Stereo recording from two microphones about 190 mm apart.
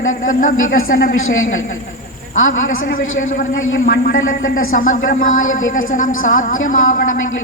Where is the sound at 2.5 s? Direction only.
45° left (ahead or behind).